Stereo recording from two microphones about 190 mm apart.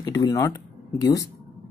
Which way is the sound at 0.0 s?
20° left (ahead or behind).